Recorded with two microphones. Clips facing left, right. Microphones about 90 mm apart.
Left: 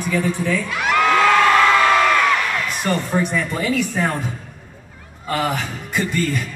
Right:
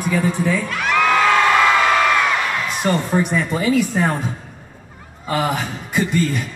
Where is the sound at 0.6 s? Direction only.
Centre (ahead or behind).